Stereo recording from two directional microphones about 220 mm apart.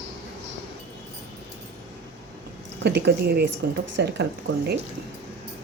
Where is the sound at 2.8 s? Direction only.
50° right (ahead or behind).